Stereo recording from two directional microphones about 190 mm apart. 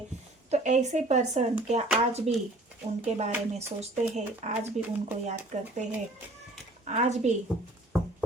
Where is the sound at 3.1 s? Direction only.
35° right (ahead or behind).